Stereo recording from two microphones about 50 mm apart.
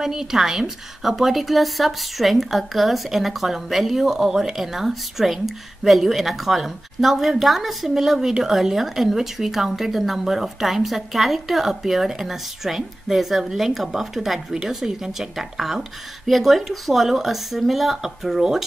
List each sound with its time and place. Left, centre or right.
0.0 s a woman's voice: centre